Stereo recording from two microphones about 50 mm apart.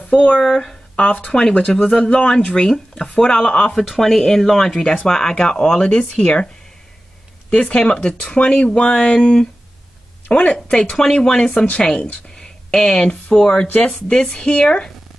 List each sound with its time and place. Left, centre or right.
0.4 s speech: centre
0.9 s speech: left
3.7 s speech: centre